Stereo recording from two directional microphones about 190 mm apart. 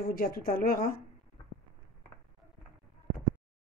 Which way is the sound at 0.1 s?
50° left (ahead or behind).